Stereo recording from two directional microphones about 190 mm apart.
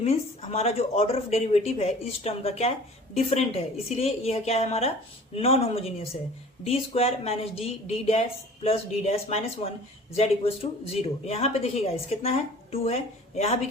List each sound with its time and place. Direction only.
0.0 s speech: 35° left (ahead or behind)